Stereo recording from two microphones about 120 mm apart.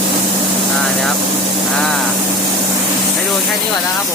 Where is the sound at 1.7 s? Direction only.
Centre (ahead or behind).